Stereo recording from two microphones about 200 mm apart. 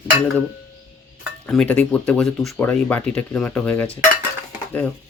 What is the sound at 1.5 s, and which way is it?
Speech, 5° left (ahead or behind).